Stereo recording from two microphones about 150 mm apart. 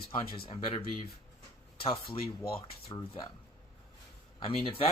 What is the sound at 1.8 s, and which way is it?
Speech, 35° left (ahead or behind).